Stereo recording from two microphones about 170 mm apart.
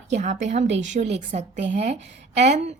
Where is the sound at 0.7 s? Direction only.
90° right.